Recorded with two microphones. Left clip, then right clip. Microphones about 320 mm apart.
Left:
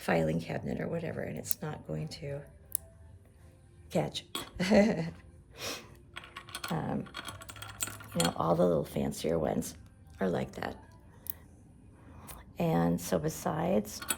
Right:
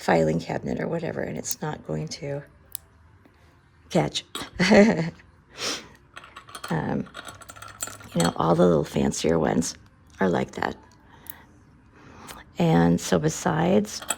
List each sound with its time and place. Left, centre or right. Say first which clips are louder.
0.0 s speech: right 9 dB; centre
3.8 s speech: right 9 dB; right
5.5 s a sound: right 9 dB; right
6.1 s mechanisms: right 2 dB; centre
6.7 s speech: right 8 dB; right
7.3 s coin: right 4 dB; centre
8.0 s speech: right 7 dB; right
12.0 s speech: right 9 dB; right